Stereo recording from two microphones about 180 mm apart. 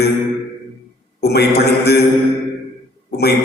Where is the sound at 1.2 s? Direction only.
65° left (ahead or behind).